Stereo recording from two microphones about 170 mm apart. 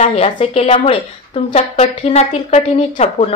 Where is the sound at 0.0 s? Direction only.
40° left (ahead or behind).